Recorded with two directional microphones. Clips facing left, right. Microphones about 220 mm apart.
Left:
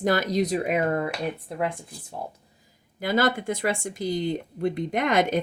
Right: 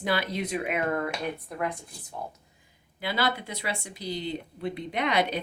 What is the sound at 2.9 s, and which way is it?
Speech, 45° left (ahead or behind).